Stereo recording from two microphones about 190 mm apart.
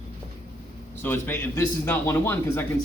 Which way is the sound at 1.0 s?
10° left (ahead or behind).